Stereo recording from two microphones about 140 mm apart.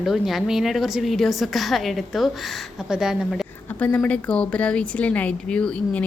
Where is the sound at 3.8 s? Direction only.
10° left (ahead or behind).